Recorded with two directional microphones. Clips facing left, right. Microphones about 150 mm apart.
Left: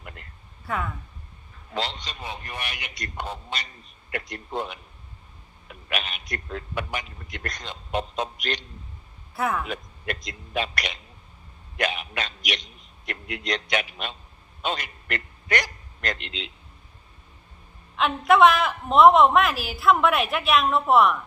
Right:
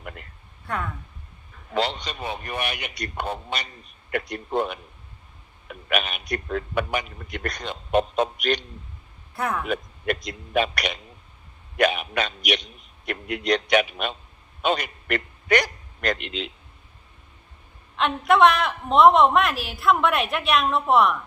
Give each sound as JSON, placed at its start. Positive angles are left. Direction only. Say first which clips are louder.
{"t": 0.7, "sound": "a woman's voice", "louder": "even", "side_deg": 0}
{"t": 1.7, "sound": "a man's voice", "louder": "right 5 dB", "side_deg": -60}
{"t": 9.3, "sound": "speech", "louder": "left 1 dB", "side_deg": 0}
{"t": 9.6, "sound": "a man's voice", "louder": "right 6 dB", "side_deg": -60}
{"t": 14.6, "sound": "a sound", "louder": "right 6 dB", "side_deg": -60}
{"t": 17.9, "sound": "a woman's voice", "louder": "even", "side_deg": 0}